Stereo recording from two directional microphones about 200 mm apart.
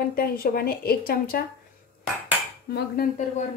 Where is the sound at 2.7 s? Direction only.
50° left (ahead or behind).